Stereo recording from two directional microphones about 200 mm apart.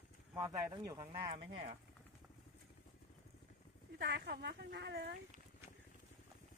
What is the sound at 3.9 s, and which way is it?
Speech, 55° right (ahead or behind).